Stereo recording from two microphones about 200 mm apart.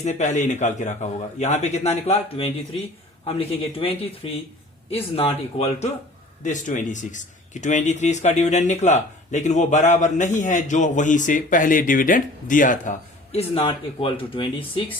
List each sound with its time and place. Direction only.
0.0 s a man's voice: 35° left (ahead or behind)